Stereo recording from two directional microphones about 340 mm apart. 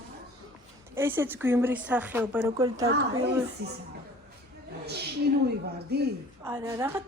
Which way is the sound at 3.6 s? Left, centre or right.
Right.